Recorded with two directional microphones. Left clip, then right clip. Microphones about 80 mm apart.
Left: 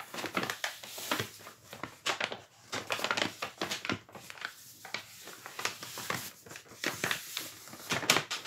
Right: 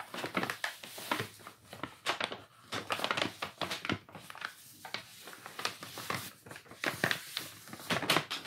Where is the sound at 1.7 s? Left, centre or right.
Centre.